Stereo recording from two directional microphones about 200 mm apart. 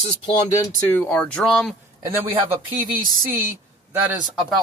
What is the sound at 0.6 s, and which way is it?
Speech, 15° left (ahead or behind).